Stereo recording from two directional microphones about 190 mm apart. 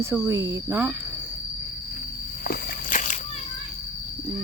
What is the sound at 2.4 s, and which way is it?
Walk, 40° left (ahead or behind).